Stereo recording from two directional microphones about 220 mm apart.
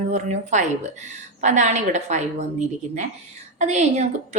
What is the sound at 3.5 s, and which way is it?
Speech, 30° right (ahead or behind).